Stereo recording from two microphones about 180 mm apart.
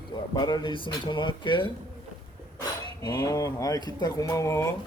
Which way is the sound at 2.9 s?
20° left (ahead or behind).